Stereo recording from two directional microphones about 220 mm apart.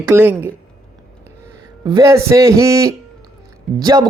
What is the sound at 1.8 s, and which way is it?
Speech, 15° right (ahead or behind).